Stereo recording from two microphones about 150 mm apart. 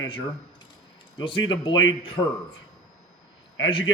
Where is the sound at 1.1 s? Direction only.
30° left (ahead or behind).